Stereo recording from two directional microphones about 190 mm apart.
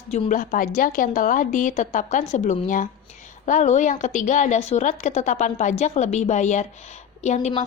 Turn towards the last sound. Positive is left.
turn(degrees=40)  # may be behind; listen again after turning